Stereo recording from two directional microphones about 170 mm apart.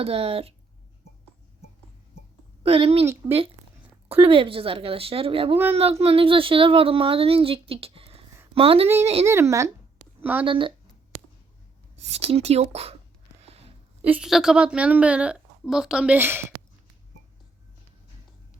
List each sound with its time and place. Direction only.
0.0 s speech: 35° right (ahead or behind)
2.6 s speech: 35° right (ahead or behind)
4.3 s speech: 30° right (ahead or behind)
9.2 s a woman's voice: 15° right (ahead or behind)
10.0 s a sound: 10° right (ahead or behind)
10.4 s speech: 30° right (ahead or behind)
12.0 s speech: 35° right (ahead or behind)
14.0 s a woman's voice: 5° right (ahead or behind)